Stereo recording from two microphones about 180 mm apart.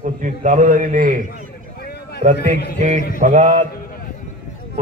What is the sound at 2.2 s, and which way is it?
Speech, 55° right (ahead or behind).